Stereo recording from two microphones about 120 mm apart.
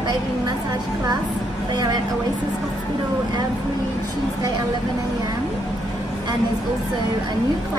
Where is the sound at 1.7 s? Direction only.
35° right (ahead or behind).